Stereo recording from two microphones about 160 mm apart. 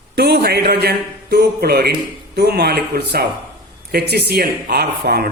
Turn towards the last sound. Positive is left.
turn(degrees=-90)